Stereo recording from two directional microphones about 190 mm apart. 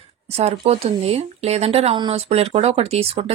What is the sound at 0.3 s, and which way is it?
Speech, 35° right (ahead or behind).